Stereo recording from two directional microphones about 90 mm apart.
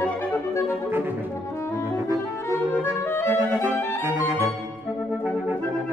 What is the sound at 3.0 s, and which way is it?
Clarinet, 25° left (ahead or behind).